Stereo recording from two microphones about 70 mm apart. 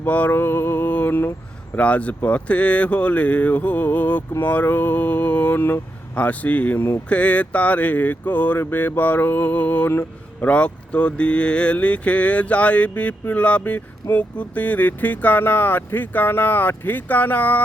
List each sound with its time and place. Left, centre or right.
0.0 s speech: left
0.3 s mantra: left
0.9 s speech: left
7.1 s speech: centre